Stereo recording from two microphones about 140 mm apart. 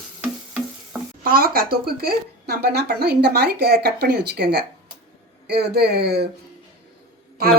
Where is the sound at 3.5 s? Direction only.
90° right.